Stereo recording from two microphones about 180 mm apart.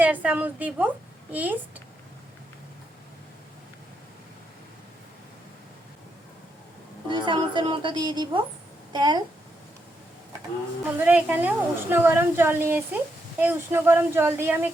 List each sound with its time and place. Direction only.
0.0 s a woman's voice: 10° right (ahead or behind)
7.1 s a woman's voice: 25° right (ahead or behind)
10.9 s a woman's voice: 10° right (ahead or behind)